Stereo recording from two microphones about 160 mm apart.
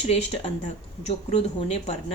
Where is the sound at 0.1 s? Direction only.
40° left (ahead or behind).